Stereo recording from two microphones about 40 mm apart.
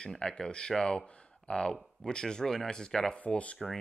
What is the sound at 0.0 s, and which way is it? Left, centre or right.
Speech, left.